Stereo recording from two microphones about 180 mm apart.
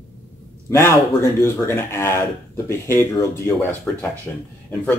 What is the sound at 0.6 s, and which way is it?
Speech, 15° left (ahead or behind).